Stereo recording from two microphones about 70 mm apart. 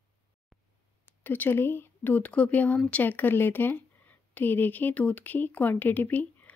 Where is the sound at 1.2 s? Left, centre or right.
Left.